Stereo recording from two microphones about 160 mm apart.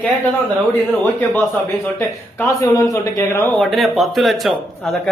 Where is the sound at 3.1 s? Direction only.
15° left (ahead or behind).